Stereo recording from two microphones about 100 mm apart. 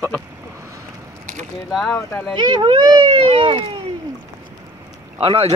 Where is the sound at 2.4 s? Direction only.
50° right (ahead or behind).